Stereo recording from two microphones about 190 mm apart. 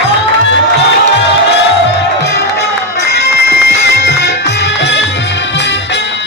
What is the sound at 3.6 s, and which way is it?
Music, 65° left (ahead or behind).